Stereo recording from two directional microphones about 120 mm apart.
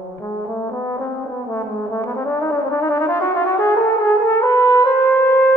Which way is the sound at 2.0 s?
25° left (ahead or behind).